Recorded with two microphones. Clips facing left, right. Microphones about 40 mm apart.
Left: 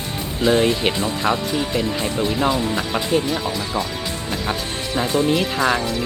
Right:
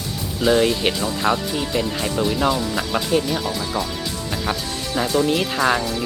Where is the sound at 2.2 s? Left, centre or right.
Left.